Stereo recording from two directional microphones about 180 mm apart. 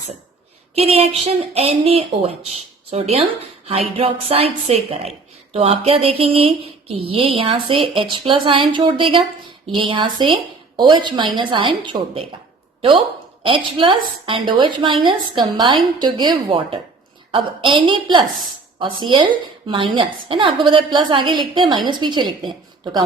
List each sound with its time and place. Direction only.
0.8 s a sound: 35° right (ahead or behind)
9.7 s a woman's voice: 30° right (ahead or behind)
13.7 s a woman's voice: 30° right (ahead or behind)